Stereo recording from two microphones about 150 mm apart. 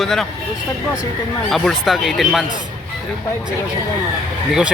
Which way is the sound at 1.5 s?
Centre (ahead or behind).